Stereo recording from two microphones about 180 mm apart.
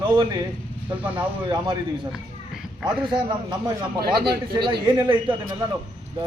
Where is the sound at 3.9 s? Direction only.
60° right (ahead or behind).